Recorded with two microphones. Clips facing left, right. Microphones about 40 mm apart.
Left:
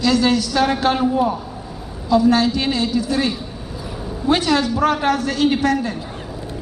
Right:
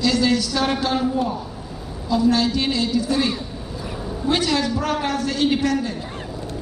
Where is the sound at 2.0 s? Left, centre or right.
Left.